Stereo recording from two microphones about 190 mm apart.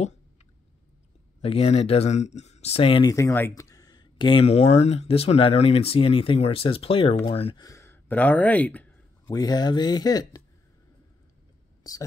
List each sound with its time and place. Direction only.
1.4 s speech: 30° left (ahead or behind)
7.6 s speech: 15° left (ahead or behind)
9.3 s speech: 20° left (ahead or behind)
11.9 s speech: 20° left (ahead or behind)